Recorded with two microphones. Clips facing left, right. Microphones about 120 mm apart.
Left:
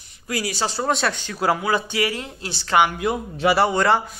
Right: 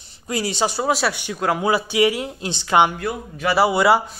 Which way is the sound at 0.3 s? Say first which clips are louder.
Right 3 dB; 25° right (ahead or behind).